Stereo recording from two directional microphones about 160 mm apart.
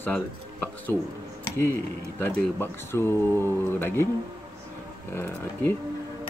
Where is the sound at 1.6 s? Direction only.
15° left (ahead or behind).